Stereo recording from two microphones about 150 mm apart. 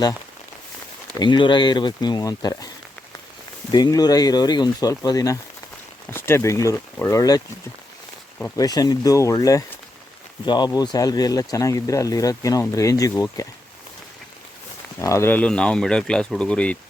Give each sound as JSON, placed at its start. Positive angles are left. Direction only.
{"t": 1.2, "sound": "speech", "side_deg": 30}
{"t": 8.5, "sound": "speech", "side_deg": 25}
{"t": 15.0, "sound": "speech", "side_deg": 15}